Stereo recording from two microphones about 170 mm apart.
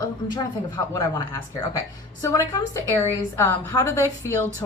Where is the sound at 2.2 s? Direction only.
15° left (ahead or behind).